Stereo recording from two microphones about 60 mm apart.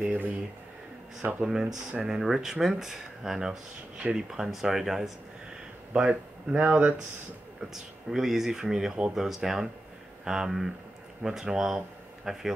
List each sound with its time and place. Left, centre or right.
0.0 s speech: right
1.4 s speech: centre
5.9 s speech: centre
7.7 s a man's voice: centre